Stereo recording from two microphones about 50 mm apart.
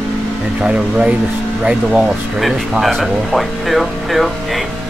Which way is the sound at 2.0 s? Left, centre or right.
Centre.